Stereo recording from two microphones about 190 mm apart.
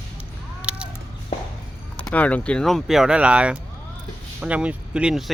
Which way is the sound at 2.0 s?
10° left (ahead or behind).